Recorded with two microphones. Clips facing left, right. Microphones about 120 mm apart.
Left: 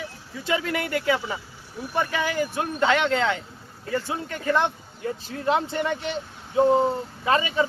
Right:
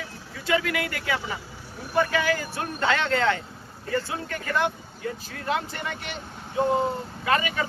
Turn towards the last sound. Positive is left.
turn(degrees=30)  # may be behind; listen again after turning